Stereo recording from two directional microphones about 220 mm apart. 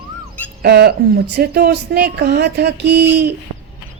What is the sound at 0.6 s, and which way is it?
A woman's voice, 50° right (ahead or behind).